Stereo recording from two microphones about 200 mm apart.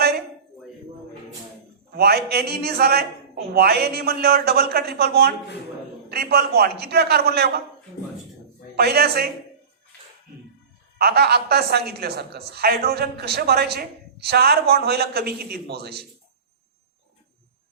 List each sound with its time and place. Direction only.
1.9 s a woman's voice: 50° right (ahead or behind)
8.7 s a woman's voice: 50° right (ahead or behind)
10.9 s a woman's voice: 50° right (ahead or behind)